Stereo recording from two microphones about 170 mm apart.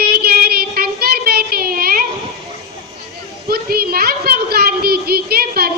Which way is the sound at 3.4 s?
65° right (ahead or behind).